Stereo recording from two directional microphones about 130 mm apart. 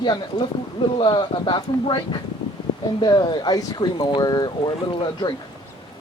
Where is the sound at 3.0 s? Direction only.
35° left (ahead or behind).